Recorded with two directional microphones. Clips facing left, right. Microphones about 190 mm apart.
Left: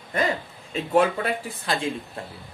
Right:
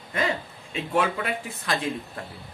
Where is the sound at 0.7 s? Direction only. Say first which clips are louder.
Left 4 dB; 40° left (ahead or behind).